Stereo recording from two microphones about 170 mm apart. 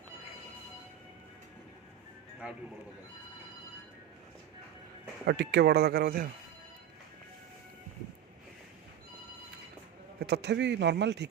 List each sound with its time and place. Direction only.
5.2 s speech: 75° right (ahead or behind); by 6.3 s 60° right (ahead or behind)
10.2 s speech: 80° right